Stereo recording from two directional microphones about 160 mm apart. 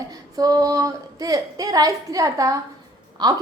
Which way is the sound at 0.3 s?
25° right (ahead or behind).